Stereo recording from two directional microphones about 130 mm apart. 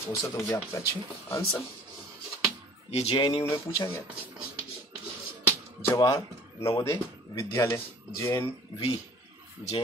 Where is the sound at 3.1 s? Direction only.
35° left (ahead or behind).